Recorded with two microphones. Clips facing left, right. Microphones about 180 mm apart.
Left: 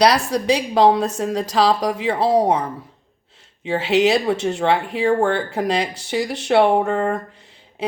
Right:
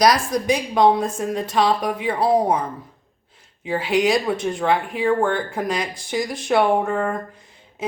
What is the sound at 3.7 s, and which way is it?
Speech, 30° left (ahead or behind).